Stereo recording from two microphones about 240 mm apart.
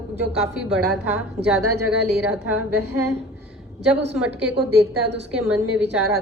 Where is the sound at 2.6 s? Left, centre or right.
Right.